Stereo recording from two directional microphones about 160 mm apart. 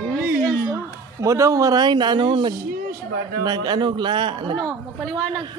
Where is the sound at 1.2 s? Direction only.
20° right (ahead or behind).